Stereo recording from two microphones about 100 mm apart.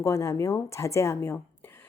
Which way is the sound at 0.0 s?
30° left (ahead or behind).